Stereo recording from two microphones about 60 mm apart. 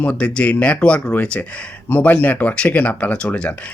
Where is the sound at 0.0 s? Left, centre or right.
Left.